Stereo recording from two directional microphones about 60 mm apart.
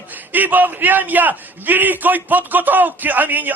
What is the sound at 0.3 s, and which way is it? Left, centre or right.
A man's voice, right.